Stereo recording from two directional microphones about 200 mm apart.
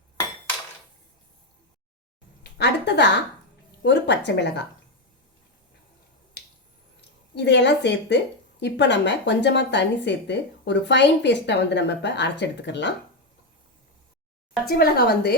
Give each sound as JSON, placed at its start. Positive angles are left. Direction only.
{"t": 2.4, "sound": "a woman's voice", "side_deg": 55}
{"t": 6.4, "sound": "finger snapping", "side_deg": 55}
{"t": 7.3, "sound": "speech", "side_deg": 60}
{"t": 14.7, "sound": "speech", "side_deg": 50}